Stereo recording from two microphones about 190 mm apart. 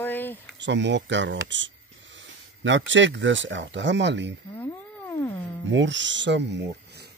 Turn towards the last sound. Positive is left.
turn(degrees=-65)  # may be behind; listen again after turning